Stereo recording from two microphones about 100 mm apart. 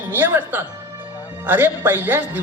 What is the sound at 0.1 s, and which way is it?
A man's voice, 20° right (ahead or behind).